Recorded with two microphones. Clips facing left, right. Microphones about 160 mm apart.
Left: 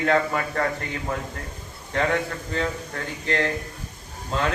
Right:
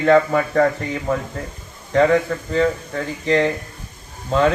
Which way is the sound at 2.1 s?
35° right (ahead or behind).